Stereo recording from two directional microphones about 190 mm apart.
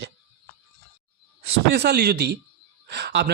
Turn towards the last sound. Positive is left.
turn(degrees=-60)  # may be behind; listen again after turning